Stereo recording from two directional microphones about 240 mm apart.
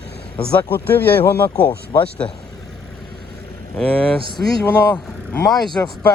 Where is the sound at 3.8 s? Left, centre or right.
Centre.